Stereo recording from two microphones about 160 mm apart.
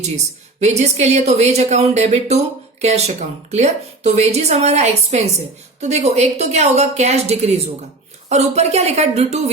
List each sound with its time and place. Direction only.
0.6 s a woman's voice: 45° right (ahead or behind)